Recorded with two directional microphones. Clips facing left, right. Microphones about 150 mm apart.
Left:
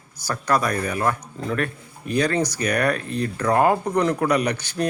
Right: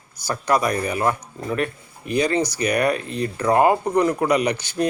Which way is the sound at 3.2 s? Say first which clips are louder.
Right 2 dB; 10° right (ahead or behind).